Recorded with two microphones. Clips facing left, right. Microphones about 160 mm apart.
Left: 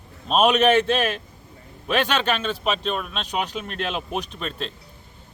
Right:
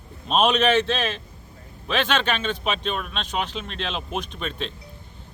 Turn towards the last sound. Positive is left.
turn(degrees=0)  # may be behind; listen again after turning